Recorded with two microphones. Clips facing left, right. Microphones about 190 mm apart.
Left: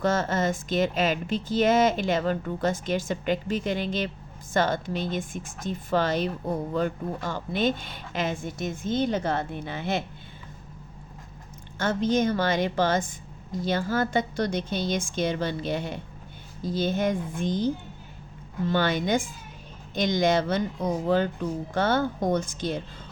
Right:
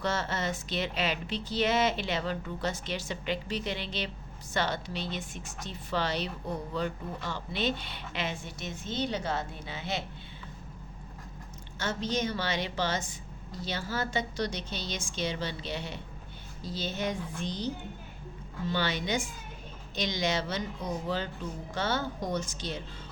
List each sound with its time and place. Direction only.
0.0 s a woman's voice: 50° left (ahead or behind)
11.8 s a woman's voice: 50° left (ahead or behind)
18.7 s a woman's voice: 50° left (ahead or behind)